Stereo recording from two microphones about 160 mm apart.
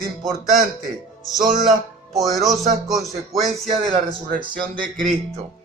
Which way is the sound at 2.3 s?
Centre (ahead or behind).